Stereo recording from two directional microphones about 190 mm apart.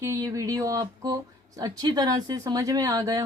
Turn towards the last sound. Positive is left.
turn(degrees=-20)  # may be behind; listen again after turning